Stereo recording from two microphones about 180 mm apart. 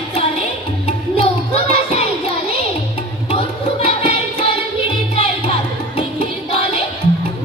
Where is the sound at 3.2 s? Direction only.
30° left (ahead or behind).